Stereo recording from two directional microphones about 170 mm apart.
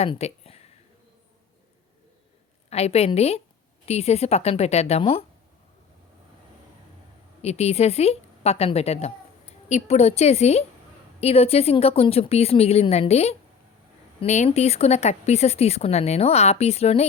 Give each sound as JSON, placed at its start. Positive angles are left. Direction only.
{"t": 0.0, "sound": "speech", "side_deg": 40}
{"t": 2.6, "sound": "speech", "side_deg": 40}
{"t": 7.4, "sound": "speech", "side_deg": 40}